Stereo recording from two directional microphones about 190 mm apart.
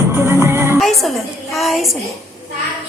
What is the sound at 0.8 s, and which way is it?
Music, centre (ahead or behind).